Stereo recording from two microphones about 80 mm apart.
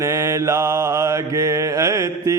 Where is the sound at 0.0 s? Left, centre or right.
Right.